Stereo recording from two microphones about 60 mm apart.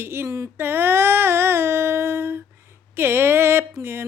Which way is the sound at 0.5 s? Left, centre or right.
Right.